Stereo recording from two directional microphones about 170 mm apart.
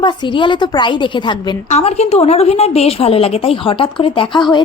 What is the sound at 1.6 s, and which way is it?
A woman's voice, 40° left (ahead or behind).